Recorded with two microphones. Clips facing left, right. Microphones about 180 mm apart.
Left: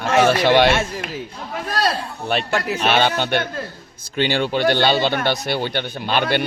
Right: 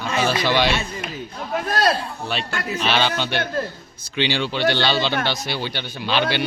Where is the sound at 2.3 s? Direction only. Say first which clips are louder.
Left 7 dB; 65° left (ahead or behind).